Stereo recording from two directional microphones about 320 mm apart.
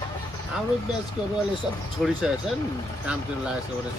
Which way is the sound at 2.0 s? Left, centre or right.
Centre.